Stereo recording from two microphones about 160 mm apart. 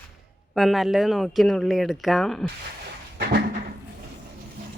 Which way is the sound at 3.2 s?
90° right.